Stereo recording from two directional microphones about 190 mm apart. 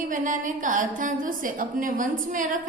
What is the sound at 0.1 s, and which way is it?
A woman's voice, 45° right (ahead or behind).